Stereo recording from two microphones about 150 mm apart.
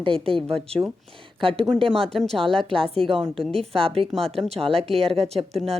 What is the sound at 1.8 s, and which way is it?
Speech, 5° left (ahead or behind).